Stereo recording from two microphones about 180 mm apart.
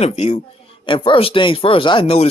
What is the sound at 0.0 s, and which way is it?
A man's voice, 35° left (ahead or behind).